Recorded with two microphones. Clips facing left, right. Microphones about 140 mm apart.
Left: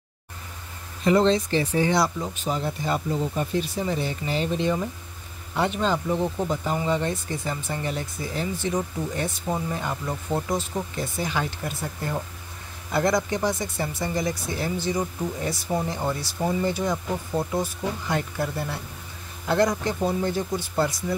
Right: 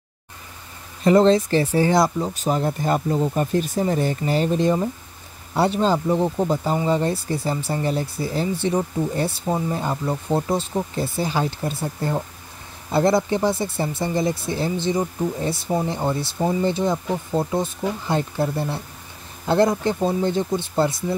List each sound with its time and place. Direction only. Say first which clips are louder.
1.0 s speech: right 5 dB; 45° right (ahead or behind); by 21.0 s 25° right (ahead or behind)